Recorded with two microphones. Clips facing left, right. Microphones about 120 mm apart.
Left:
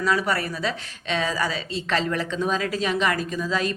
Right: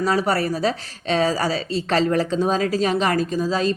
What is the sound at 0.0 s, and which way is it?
A woman's voice, 35° right (ahead or behind).